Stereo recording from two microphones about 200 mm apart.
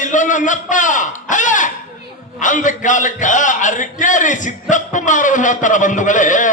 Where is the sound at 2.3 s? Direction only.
40° left (ahead or behind).